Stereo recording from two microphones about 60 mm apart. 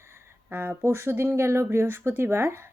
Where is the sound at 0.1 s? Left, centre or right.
Right.